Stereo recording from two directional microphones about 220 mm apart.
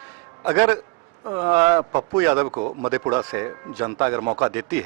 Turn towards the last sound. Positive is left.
turn(degrees=-10)  # may be behind; listen again after turning